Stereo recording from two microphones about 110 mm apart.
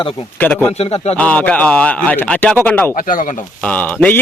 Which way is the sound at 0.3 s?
15° left (ahead or behind).